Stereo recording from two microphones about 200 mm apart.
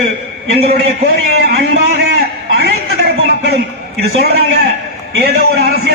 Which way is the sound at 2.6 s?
55° right (ahead or behind).